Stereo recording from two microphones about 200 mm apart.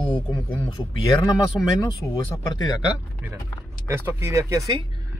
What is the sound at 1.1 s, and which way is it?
Speech, 25° left (ahead or behind).